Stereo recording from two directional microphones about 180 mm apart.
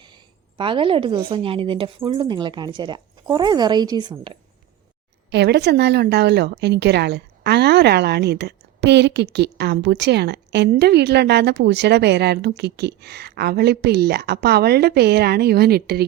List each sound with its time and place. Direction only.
0.0 s a woman's voice: 25° right (ahead or behind)
5.3 s a woman's voice: 70° right (ahead or behind)